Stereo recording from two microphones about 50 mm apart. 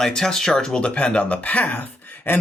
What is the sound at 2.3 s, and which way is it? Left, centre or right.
Speech, left.